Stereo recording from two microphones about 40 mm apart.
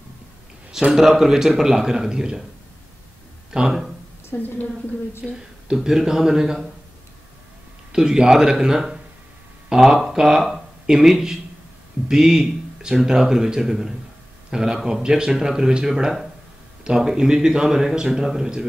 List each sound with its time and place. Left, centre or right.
0.9 s a man's voice: centre
3.5 s speech: centre
4.3 s a woman's voice: left
5.3 s a man's voice: centre
7.9 s a man's voice: right
12.4 s a man's voice: centre
15.9 s a man's voice: centre